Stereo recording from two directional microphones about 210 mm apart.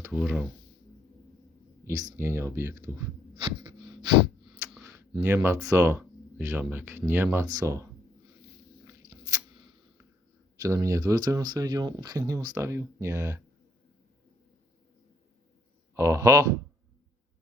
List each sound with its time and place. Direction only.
0.0 s speech: 10° right (ahead or behind)
1.8 s speech: 15° right (ahead or behind)
4.8 s speech: 15° right (ahead or behind)
8.9 s a sound: 15° right (ahead or behind)
10.6 s speech: 15° right (ahead or behind)
16.0 s speech: 15° right (ahead or behind)